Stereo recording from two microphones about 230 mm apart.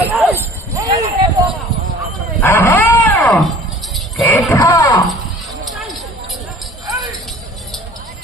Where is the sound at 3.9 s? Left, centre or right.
Centre.